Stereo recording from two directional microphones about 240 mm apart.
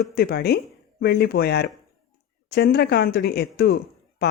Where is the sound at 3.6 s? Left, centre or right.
Left.